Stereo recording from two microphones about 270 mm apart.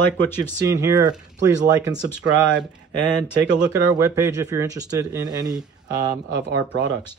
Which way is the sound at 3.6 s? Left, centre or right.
Centre.